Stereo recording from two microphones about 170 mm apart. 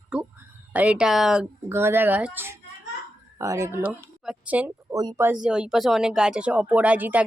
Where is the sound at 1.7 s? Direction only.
15° right (ahead or behind).